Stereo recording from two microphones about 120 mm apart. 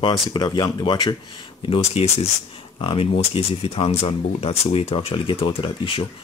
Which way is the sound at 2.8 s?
50° left (ahead or behind).